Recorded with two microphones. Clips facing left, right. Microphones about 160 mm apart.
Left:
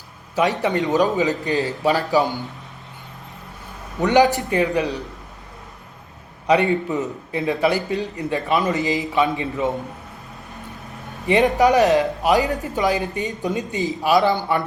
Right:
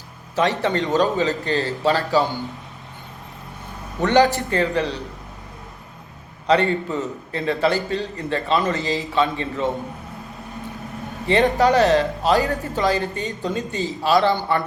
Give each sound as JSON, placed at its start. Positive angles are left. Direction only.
{"t": 0.3, "sound": "a man's voice", "side_deg": 15}
{"t": 4.0, "sound": "a man's voice", "side_deg": 15}
{"t": 6.5, "sound": "a man's voice", "side_deg": 15}
{"t": 11.3, "sound": "a man's voice", "side_deg": 15}